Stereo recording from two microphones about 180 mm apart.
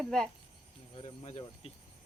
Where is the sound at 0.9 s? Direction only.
35° left (ahead or behind).